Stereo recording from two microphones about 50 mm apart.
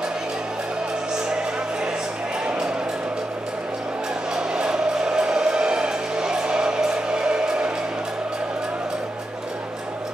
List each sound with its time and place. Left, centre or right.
4.4 s music: centre